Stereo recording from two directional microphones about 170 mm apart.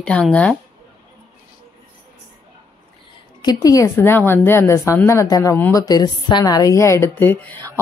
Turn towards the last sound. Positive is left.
turn(degrees=10)  # may be behind; listen again after turning